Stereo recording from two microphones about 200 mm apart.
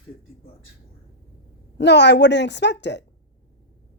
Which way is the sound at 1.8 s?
60° left (ahead or behind).